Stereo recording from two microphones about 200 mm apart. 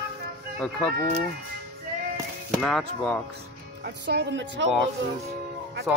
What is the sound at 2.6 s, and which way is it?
Speech, 5° left (ahead or behind).